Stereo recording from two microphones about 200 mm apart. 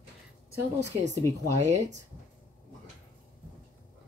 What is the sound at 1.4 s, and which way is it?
Speech, 15° right (ahead or behind).